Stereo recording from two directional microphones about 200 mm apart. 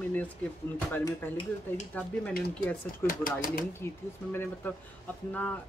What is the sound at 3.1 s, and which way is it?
Speech, 40° left (ahead or behind).